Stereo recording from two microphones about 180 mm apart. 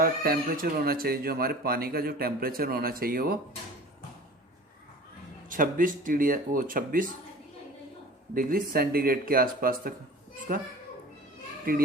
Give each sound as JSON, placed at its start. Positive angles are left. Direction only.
{"t": 0.0, "sound": "speech", "side_deg": -55}
{"t": 5.5, "sound": "speech", "side_deg": -50}
{"t": 8.4, "sound": "speech", "side_deg": -50}